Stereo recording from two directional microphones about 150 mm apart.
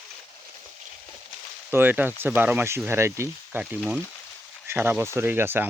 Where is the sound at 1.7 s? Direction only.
15° right (ahead or behind).